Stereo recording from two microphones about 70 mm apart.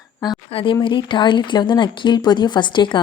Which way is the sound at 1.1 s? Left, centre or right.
Left.